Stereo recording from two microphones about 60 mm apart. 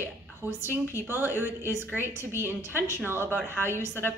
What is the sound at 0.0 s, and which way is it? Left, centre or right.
A woman's voice, right.